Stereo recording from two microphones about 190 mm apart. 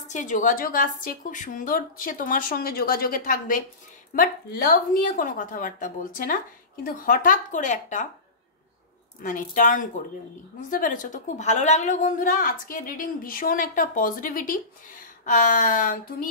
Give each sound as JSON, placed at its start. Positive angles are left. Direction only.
{"t": 0.1, "sound": "a woman's voice", "side_deg": 40}
{"t": 9.2, "sound": "a woman's voice", "side_deg": 45}